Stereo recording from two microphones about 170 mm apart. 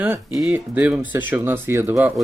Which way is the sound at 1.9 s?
5° right (ahead or behind).